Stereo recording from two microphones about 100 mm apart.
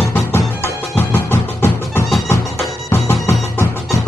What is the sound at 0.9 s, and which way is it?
Music, 20° left (ahead or behind).